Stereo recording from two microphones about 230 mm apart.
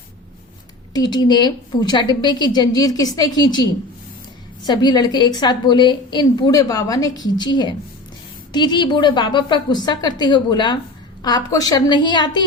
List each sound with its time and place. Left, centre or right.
0.9 s a woman's voice: centre